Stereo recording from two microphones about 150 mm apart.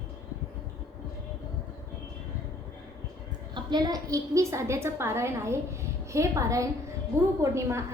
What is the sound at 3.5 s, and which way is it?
A woman's voice, 30° right (ahead or behind).